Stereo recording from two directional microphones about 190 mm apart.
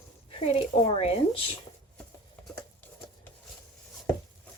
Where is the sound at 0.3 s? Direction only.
30° left (ahead or behind).